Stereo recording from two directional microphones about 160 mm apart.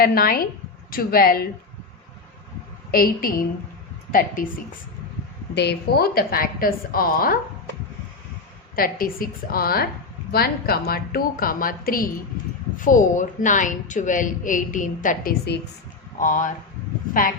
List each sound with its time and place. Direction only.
0.0 s a woman's voice: 65° left (ahead or behind)
2.9 s a woman's voice: 65° left (ahead or behind)
5.5 s a woman's voice: 85° left; by 7.3 s 65° left (ahead or behind)
8.7 s a woman's voice: 65° left (ahead or behind); by 15.6 s 80° left
16.2 s a woman's voice: 55° left (ahead or behind)